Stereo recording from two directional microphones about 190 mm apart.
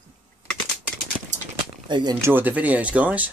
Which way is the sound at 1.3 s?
40° right (ahead or behind).